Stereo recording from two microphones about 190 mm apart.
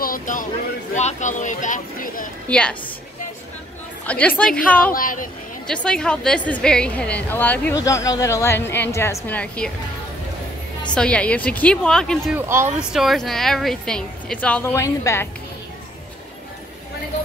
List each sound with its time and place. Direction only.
0.0 s speech: 45° left (ahead or behind)
2.4 s a woman's voice: 5° left (ahead or behind)
4.0 s a woman's voice: 5° left (ahead or behind)
4.9 s a woman's voice: 45° left (ahead or behind)
5.7 s a woman's voice: 5° left (ahead or behind)
11.0 s a woman's voice: 5° left (ahead or behind)
12.4 s speech: 15° right (ahead or behind)
12.9 s a woman's voice: centre (ahead or behind)